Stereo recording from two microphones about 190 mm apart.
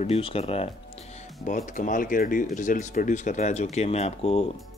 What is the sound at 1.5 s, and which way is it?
Speech, 45° left (ahead or behind).